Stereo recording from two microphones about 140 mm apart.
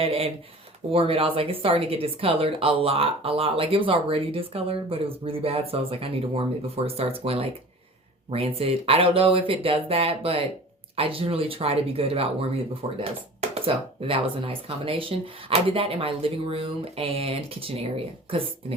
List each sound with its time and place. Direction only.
0.0 s speech: 45° right (ahead or behind)